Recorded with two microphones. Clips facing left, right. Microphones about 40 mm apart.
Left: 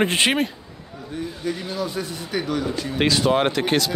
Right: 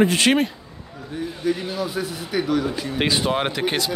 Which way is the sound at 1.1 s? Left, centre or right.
Centre.